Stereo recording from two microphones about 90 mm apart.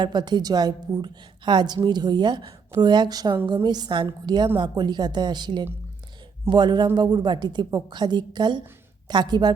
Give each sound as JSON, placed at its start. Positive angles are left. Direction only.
{"t": 0.0, "sound": "a woman's voice", "side_deg": -55}